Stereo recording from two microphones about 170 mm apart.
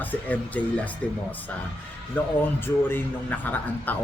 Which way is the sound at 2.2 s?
10° left (ahead or behind).